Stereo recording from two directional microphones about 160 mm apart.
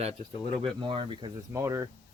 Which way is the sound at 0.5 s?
35° right (ahead or behind).